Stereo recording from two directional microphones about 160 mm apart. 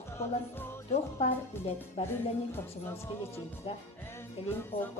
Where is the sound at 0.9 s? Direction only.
40° left (ahead or behind).